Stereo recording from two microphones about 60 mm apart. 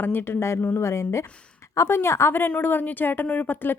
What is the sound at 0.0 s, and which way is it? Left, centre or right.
Speech, left.